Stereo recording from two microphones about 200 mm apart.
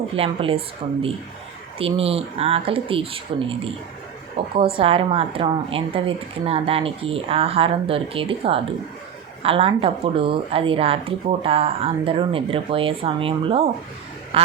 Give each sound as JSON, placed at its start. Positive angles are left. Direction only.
{"t": 0.2, "sound": "a woman's voice", "side_deg": -30}
{"t": 1.8, "sound": "a woman's voice", "side_deg": -30}
{"t": 4.5, "sound": "a woman's voice", "side_deg": -25}